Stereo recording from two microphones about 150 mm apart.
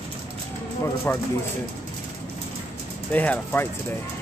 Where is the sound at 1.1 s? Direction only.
15° left (ahead or behind).